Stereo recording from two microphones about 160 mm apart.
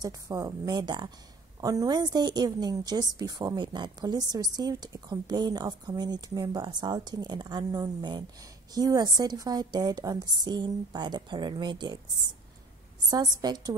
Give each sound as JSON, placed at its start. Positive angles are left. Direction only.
{"t": 0.0, "sound": "a woman's voice", "side_deg": -25}
{"t": 13.1, "sound": "a woman's voice", "side_deg": -25}